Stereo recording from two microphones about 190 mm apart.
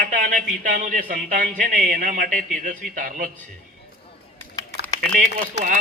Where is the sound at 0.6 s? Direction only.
45° right (ahead or behind).